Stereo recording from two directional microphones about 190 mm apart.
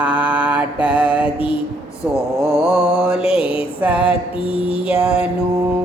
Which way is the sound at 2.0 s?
10° right (ahead or behind).